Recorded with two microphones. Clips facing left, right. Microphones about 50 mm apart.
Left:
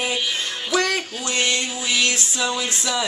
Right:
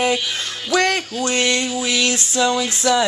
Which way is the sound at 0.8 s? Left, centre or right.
Right.